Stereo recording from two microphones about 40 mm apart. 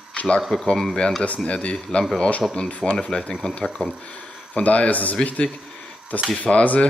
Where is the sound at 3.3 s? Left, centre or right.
Left.